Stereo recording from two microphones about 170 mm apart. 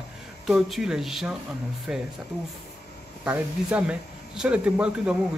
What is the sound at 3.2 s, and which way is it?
Speech, 10° right (ahead or behind).